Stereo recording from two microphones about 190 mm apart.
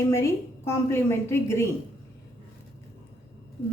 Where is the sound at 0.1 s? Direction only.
15° left (ahead or behind).